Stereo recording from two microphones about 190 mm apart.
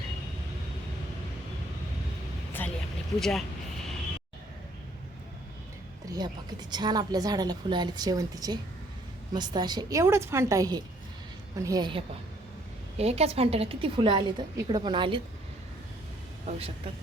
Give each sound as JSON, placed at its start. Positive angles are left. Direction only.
{"t": 2.6, "sound": "vehicle", "side_deg": 10}
{"t": 3.2, "sound": "speech", "side_deg": 0}
{"t": 6.1, "sound": "a woman's voice", "side_deg": -20}
{"t": 16.5, "sound": "speech", "side_deg": -30}